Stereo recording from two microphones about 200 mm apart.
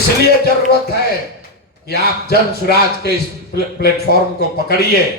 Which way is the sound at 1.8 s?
55° left (ahead or behind).